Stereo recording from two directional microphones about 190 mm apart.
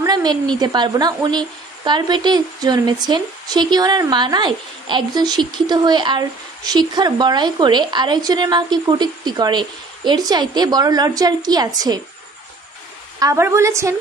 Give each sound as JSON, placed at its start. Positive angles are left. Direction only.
{"t": 0.0, "sound": "a woman's voice", "side_deg": -20}
{"t": 13.2, "sound": "a woman's voice", "side_deg": -15}